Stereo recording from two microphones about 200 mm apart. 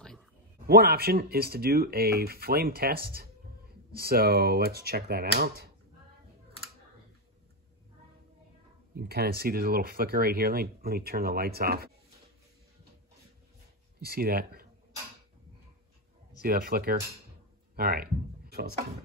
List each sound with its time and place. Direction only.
0.7 s speech: 50° right (ahead or behind)
8.9 s speech: 50° right (ahead or behind)
14.0 s speech: 50° right (ahead or behind)
16.3 s speech: 50° right (ahead or behind)